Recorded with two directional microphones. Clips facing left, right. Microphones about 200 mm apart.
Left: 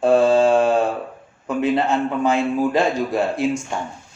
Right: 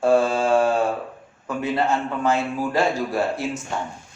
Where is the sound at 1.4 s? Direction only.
15° left (ahead or behind).